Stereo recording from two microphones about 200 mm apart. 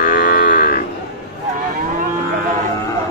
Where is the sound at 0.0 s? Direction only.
40° left (ahead or behind).